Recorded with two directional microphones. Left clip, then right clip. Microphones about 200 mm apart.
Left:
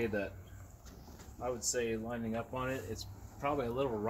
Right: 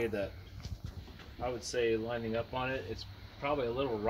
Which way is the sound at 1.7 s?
40° right (ahead or behind).